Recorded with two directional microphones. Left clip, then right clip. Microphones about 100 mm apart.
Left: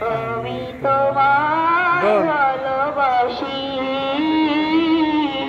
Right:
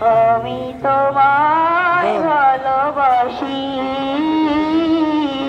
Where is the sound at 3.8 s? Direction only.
25° right (ahead or behind).